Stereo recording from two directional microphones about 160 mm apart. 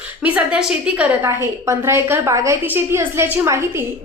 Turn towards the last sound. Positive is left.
turn(degrees=-15)  # may be behind; listen again after turning